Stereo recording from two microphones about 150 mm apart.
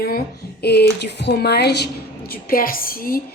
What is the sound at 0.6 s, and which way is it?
A woman's voice, 90° left.